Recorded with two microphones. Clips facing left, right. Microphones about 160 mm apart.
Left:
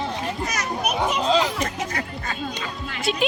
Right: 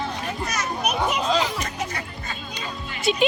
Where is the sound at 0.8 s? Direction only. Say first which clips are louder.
Left 1 dB; 5° left (ahead or behind).